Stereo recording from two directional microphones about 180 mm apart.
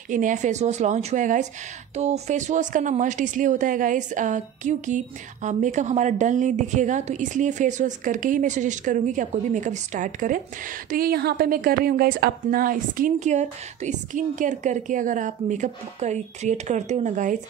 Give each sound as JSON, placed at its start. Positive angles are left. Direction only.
{"t": 0.1, "sound": "a woman's voice", "side_deg": -45}